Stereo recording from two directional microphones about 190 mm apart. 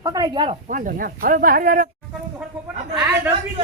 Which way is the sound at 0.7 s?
45° right (ahead or behind).